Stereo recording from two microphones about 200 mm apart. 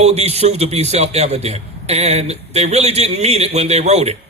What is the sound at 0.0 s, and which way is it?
A man's voice, 30° right (ahead or behind).